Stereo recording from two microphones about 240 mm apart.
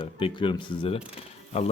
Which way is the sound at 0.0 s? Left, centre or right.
Left.